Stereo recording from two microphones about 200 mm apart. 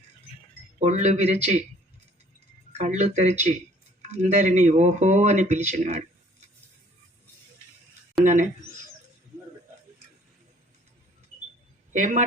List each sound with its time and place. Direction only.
0.8 s speech: 35° right (ahead or behind)
2.7 s speech: 35° right (ahead or behind)
8.2 s speech: 40° right (ahead or behind)
11.9 s speech: 35° right (ahead or behind)